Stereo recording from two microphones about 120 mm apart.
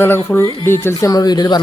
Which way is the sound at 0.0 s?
20° left (ahead or behind).